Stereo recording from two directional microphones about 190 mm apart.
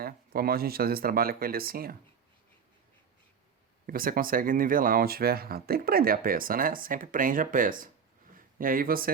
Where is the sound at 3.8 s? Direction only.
50° right (ahead or behind).